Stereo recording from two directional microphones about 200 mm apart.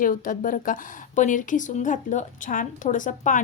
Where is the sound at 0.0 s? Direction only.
40° left (ahead or behind).